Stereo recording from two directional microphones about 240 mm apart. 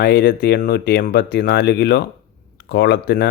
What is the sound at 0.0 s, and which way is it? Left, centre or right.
Speech, left.